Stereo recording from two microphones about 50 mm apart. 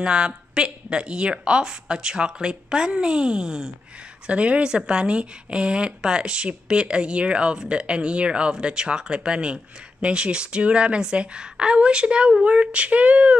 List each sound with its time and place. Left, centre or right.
0.0 s a woman's voice: centre
4.3 s speech: right